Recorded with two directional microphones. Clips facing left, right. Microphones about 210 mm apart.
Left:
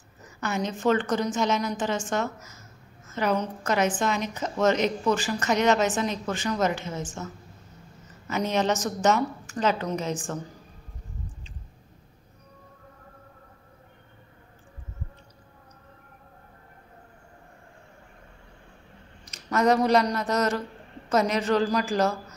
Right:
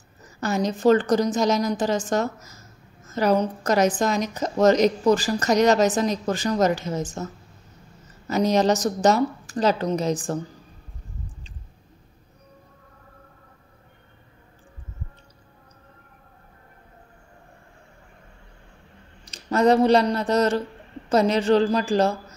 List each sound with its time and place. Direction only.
0.4 s a woman's voice: 35° right (ahead or behind)
8.3 s a woman's voice: 35° right (ahead or behind)
19.2 s a man's voice: 30° right (ahead or behind)